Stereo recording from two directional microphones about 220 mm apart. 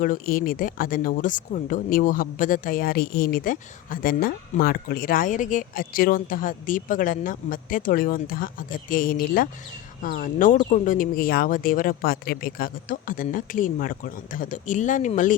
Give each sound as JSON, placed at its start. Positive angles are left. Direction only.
{"t": 0.0, "sound": "speech", "side_deg": 40}